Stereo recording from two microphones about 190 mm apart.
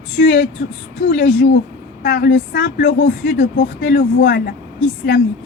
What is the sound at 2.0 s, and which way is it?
Speech, 60° left (ahead or behind).